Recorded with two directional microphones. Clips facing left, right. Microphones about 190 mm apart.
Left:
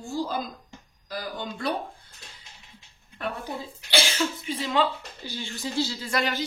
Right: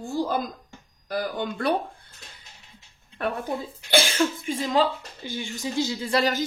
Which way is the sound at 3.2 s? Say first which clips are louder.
Right 5 dB; 55° right (ahead or behind).